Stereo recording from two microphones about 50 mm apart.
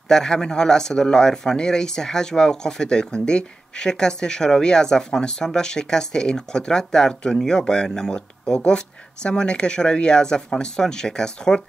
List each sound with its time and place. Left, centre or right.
0.1 s speech: centre